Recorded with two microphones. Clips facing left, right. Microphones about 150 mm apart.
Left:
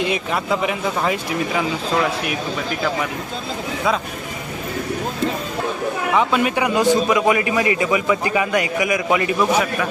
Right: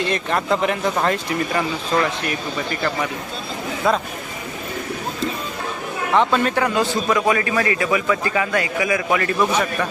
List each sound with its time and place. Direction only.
0.0 s speech: 5° left (ahead or behind)
6.1 s a man's voice: 10° left (ahead or behind)